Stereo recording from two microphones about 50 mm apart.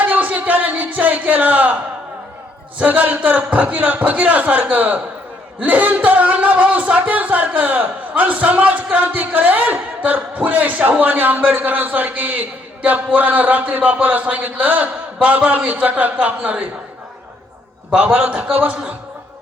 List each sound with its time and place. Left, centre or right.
0.0 s music: right
2.7 s a man's voice: right
17.9 s a man's voice: right